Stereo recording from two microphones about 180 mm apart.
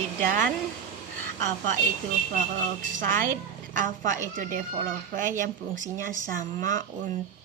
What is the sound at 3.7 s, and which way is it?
Speech, 45° right (ahead or behind).